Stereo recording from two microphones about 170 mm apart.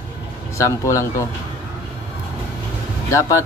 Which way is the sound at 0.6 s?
20° left (ahead or behind).